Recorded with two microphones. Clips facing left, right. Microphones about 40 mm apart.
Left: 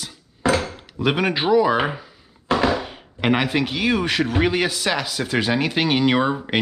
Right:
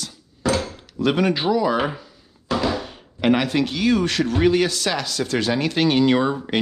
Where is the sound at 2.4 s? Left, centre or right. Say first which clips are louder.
Left 3 dB; left.